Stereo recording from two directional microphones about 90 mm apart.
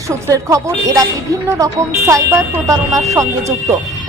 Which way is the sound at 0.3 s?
35° right (ahead or behind).